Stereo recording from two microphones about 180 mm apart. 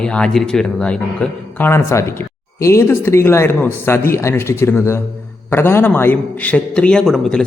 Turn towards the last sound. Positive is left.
turn(degrees=0)  # may be behind; listen again after turning